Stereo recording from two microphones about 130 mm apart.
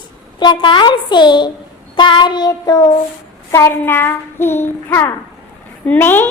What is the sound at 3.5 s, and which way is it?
Child singing, 20° left (ahead or behind).